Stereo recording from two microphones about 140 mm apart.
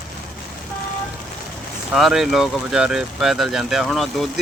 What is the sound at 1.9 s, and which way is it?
Speech, centre (ahead or behind).